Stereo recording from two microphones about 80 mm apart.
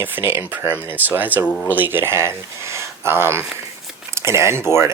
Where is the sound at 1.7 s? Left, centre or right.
Right.